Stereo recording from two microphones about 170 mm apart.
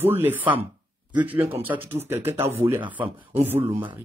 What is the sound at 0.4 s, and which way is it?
Speech, 30° right (ahead or behind).